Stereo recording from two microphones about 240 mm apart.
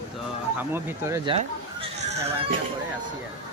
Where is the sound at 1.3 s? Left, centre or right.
Right.